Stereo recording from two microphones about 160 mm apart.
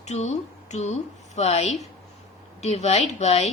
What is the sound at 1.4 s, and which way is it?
A woman's voice, 45° left (ahead or behind).